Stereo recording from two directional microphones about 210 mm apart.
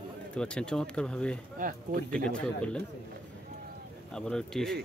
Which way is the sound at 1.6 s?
40° right (ahead or behind).